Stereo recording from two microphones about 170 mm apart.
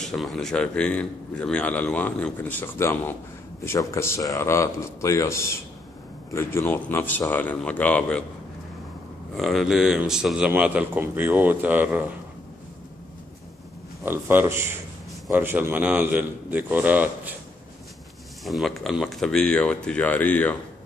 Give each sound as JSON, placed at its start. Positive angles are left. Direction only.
{"t": 0.0, "sound": "a man's voice", "side_deg": 0}
{"t": 9.4, "sound": "speech", "side_deg": 0}
{"t": 14.0, "sound": "speech", "side_deg": -10}
{"t": 18.4, "sound": "speech", "side_deg": 0}